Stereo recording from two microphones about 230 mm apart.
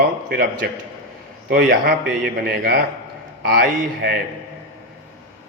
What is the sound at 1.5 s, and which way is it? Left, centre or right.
A man's voice, right.